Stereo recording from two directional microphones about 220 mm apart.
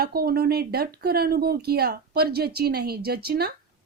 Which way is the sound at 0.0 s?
45° right (ahead or behind).